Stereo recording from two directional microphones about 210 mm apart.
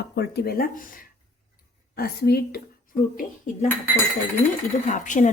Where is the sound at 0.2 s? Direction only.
50° left (ahead or behind).